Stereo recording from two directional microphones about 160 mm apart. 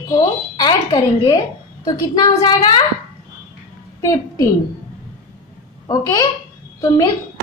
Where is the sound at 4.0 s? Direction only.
20° left (ahead or behind).